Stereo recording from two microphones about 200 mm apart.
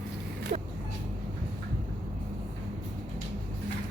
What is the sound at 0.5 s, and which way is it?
Vehicle, 35° right (ahead or behind).